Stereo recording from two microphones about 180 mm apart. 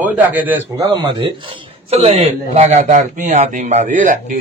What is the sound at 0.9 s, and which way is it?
Speech, 25° right (ahead or behind).